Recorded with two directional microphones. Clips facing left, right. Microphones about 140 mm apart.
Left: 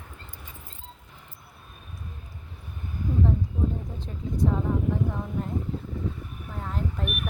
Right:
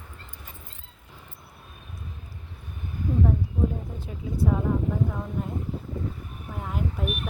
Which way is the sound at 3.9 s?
10° right (ahead or behind).